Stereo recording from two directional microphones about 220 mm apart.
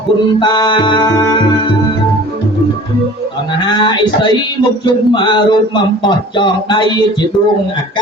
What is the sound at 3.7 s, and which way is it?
Speech, 20° left (ahead or behind).